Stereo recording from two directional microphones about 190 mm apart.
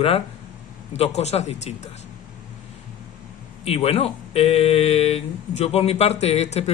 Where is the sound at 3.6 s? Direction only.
30° left (ahead or behind).